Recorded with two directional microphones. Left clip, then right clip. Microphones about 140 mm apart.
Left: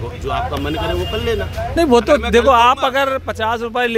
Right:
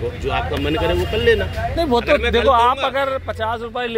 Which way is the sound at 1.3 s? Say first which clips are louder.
Right 6 dB; 40° left (ahead or behind).